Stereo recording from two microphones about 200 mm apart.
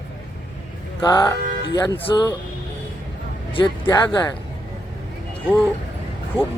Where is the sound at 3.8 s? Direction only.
15° left (ahead or behind).